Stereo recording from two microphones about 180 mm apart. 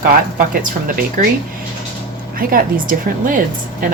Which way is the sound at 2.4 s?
55° right (ahead or behind).